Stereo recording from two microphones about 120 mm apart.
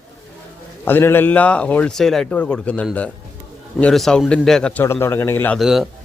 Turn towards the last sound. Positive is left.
turn(degrees=0)  # may be behind; listen again after turning